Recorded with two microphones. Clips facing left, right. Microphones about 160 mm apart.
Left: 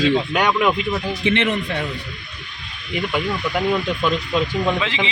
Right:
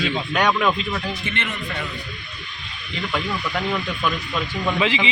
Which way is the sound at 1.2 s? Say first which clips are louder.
Left 10 dB; 85° left.